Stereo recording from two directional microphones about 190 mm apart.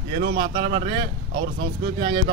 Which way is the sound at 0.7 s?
25° right (ahead or behind).